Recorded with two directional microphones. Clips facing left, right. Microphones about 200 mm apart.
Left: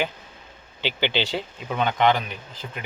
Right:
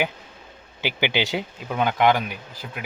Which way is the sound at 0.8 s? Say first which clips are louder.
Right 1 dB; 10° right (ahead or behind).